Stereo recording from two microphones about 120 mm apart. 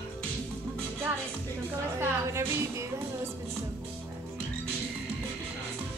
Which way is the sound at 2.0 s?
25° right (ahead or behind).